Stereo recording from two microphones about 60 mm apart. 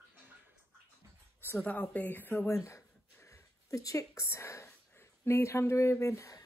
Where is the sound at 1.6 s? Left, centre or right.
Left.